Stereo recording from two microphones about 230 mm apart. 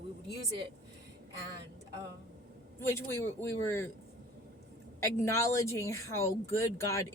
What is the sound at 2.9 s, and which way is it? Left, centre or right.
Speech, centre.